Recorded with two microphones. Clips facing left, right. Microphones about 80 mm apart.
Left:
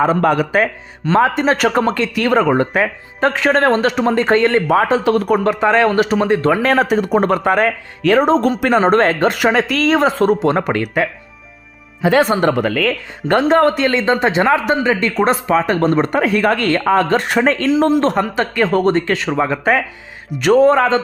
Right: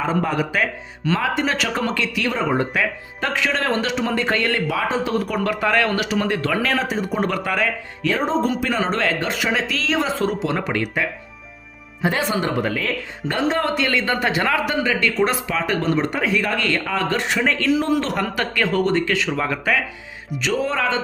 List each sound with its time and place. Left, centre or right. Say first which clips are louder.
0.0 s speech: left 7 dB; left
0.5 s speech: left 6 dB; left
2.7 s speech: left 5 dB; left
4.7 s speech: left 8 dB; left
5.4 s a man's voice: left 6 dB; left
6.7 s speech: left 8 dB; left
7.2 s speech: left 7 dB; left
8.0 s speech: left 8 dB; left
8.7 s speech: left 9 dB; left
12.4 s a man's voice: left 7 dB; left
20.4 s speech: left 11 dB; left